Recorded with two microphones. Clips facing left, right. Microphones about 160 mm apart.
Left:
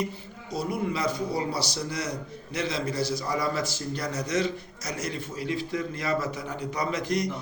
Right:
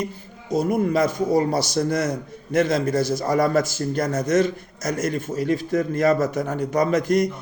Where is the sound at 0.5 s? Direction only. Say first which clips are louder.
Right 9 dB; 45° right (ahead or behind).